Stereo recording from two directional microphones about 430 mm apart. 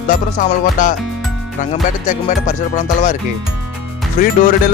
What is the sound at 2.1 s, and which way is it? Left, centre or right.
Speech, centre.